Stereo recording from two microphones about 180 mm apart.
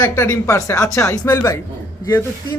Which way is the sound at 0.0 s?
15° left (ahead or behind).